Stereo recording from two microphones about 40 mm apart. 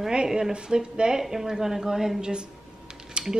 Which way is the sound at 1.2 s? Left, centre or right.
Centre.